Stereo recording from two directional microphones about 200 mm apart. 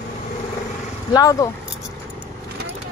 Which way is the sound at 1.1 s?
15° left (ahead or behind).